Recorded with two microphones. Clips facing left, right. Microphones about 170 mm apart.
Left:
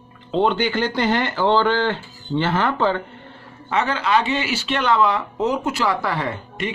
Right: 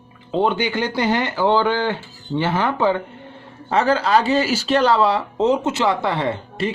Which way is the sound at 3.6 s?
35° right (ahead or behind).